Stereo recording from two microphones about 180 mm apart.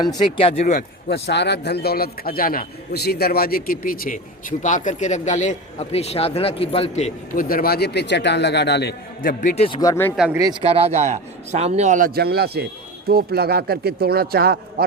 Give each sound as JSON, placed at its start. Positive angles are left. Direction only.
{"t": 0.0, "sound": "speech", "side_deg": 25}
{"t": 0.8, "sound": "a man's voice", "side_deg": 65}
{"t": 9.4, "sound": "speech", "side_deg": 45}
{"t": 9.6, "sound": "speech", "side_deg": 20}
{"t": 10.3, "sound": "speech", "side_deg": -20}
{"t": 10.6, "sound": "a man's voice", "side_deg": -30}